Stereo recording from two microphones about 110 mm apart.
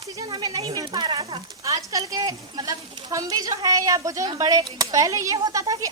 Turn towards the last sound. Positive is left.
turn(degrees=-30)  # may be behind; listen again after turning